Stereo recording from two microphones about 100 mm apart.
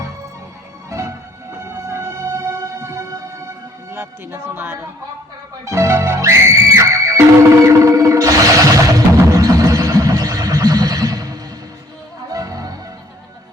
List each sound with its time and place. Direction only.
0.9 s music: 35° right (ahead or behind)
3.9 s speech: 25° right (ahead or behind)
5.6 s music: 30° right (ahead or behind)